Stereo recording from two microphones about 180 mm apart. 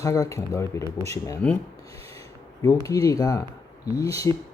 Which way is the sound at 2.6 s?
20° left (ahead or behind).